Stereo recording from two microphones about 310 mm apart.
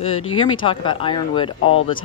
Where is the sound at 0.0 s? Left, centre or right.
Centre.